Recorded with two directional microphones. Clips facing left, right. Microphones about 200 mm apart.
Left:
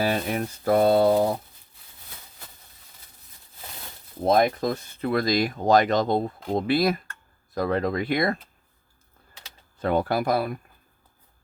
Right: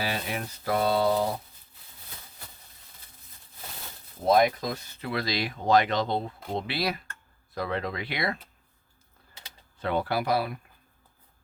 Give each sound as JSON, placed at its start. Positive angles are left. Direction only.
{"t": 0.0, "sound": "speech", "side_deg": 45}
{"t": 4.3, "sound": "speech", "side_deg": 50}
{"t": 9.8, "sound": "speech", "side_deg": 45}